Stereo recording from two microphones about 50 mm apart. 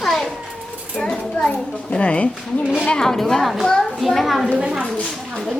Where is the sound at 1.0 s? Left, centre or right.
Centre.